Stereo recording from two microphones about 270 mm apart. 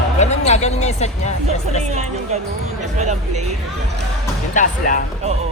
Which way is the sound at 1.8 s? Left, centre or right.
Right.